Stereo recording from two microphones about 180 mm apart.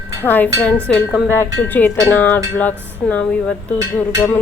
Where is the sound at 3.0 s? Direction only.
5° left (ahead or behind).